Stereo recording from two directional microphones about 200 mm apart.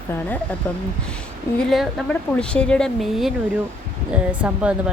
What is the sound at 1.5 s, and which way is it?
Speech, centre (ahead or behind).